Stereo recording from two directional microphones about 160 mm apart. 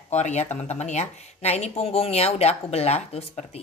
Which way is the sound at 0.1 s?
45° left (ahead or behind).